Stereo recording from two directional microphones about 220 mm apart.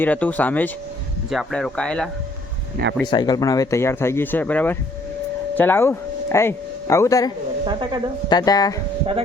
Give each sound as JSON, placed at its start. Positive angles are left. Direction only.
{"t": 0.0, "sound": "speech", "side_deg": 5}
{"t": 3.1, "sound": "speech", "side_deg": 20}
{"t": 7.6, "sound": "speech", "side_deg": -20}
{"t": 8.3, "sound": "speech", "side_deg": 15}